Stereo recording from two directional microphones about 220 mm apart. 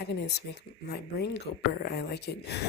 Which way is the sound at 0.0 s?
50° left (ahead or behind).